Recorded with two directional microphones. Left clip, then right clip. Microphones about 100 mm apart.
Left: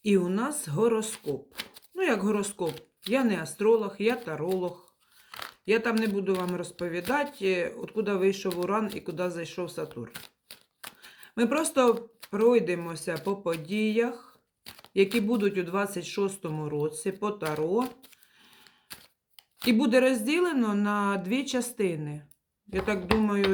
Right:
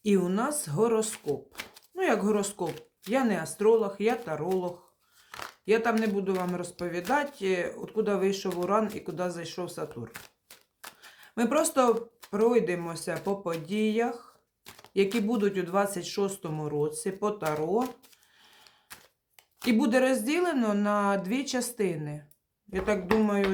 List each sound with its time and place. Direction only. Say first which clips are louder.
0.0 s speech: even; 25° right (ahead or behind)
5.6 s speech: right 1 dB; 20° right (ahead or behind)
19.6 s speech: left 2 dB; 20° right (ahead or behind)